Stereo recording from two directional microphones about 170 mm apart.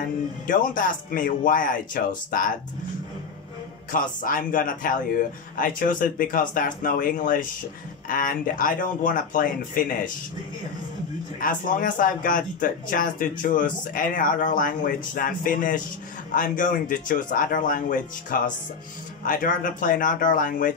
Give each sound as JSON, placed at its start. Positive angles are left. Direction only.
{"t": 0.5, "sound": "speech", "side_deg": 50}
{"t": 4.2, "sound": "speech", "side_deg": 50}
{"t": 11.3, "sound": "speech", "side_deg": 55}